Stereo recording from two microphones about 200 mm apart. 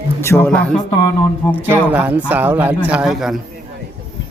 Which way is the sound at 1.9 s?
10° right (ahead or behind).